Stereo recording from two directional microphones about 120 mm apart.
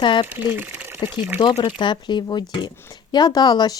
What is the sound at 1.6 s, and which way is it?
Speech, 40° left (ahead or behind).